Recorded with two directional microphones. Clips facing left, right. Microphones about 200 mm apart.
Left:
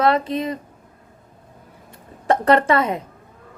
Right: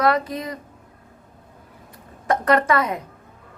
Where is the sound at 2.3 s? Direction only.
30° left (ahead or behind).